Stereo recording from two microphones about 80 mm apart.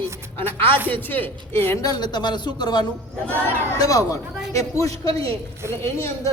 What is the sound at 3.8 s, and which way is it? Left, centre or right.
A man's voice, left.